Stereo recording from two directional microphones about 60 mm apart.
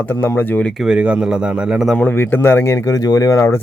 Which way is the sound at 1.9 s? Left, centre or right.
Left.